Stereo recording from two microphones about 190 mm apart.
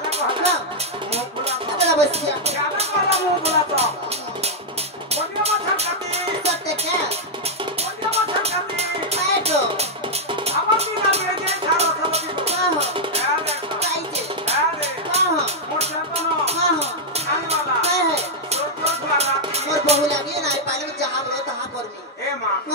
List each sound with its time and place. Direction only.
0.1 s music: 35° right (ahead or behind)
1.1 s speech: 35° right (ahead or behind)
5.1 s music: 35° right (ahead or behind)